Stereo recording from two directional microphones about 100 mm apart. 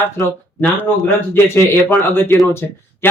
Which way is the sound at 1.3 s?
25° left (ahead or behind).